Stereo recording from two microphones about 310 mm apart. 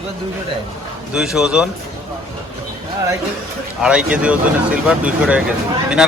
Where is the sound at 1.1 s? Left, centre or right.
Centre.